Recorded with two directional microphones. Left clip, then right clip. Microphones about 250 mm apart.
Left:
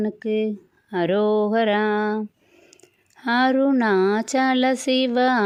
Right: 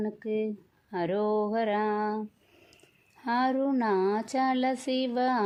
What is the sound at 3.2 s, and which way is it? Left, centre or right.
Speech, left.